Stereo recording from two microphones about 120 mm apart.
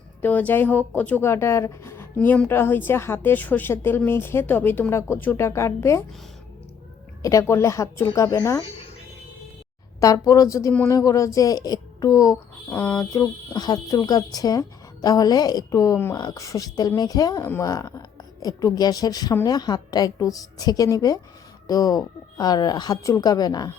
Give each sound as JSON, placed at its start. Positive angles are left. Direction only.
{"t": 0.2, "sound": "a woman's voice", "side_deg": 15}
{"t": 7.2, "sound": "a woman's voice", "side_deg": 25}
{"t": 10.0, "sound": "a woman's voice", "side_deg": 30}
{"t": 12.7, "sound": "a woman's voice", "side_deg": 15}
{"t": 13.1, "sound": "a woman's voice", "side_deg": 30}